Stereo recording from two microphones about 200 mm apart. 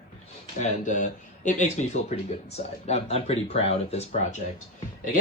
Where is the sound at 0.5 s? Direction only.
35° left (ahead or behind).